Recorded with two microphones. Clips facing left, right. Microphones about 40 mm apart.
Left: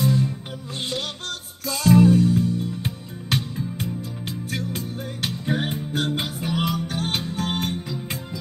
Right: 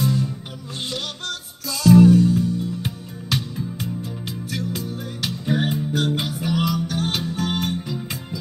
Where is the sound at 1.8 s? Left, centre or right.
Left.